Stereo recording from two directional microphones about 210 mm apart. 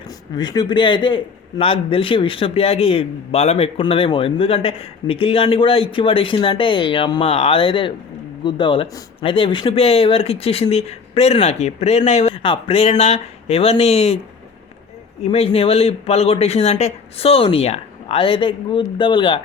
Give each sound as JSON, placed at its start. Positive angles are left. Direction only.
{"t": 0.3, "sound": "a man's voice", "side_deg": 20}
{"t": 15.2, "sound": "a man's voice", "side_deg": 30}